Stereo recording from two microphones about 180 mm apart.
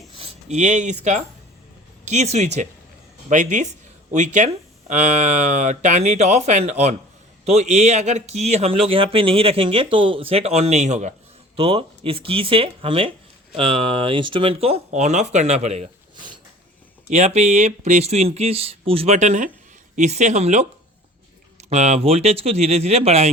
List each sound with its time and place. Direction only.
0.1 s speech: 30° right (ahead or behind)
17.1 s speech: 40° right (ahead or behind)